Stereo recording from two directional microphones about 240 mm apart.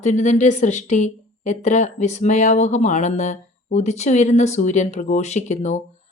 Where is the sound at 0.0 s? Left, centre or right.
Left.